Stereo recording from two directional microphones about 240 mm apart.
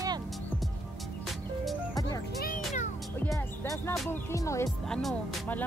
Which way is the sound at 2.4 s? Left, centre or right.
Left.